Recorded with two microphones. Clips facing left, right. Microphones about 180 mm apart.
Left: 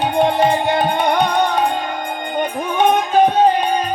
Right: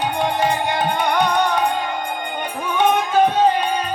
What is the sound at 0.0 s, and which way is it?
Music, 25° left (ahead or behind).